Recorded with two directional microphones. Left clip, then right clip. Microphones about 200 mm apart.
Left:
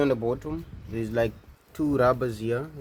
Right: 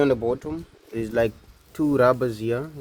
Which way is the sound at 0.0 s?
40° right (ahead or behind).